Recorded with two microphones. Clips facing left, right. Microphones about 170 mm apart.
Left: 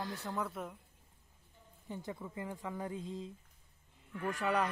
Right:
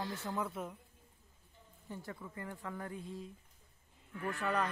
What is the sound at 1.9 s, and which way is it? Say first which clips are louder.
Speech: left 3 dB; 20° left (ahead or behind).